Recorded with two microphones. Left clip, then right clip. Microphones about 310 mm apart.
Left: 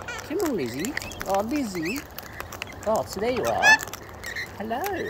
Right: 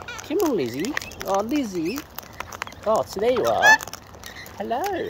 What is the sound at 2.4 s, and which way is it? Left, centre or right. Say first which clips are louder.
Speech: right 4 dB; centre.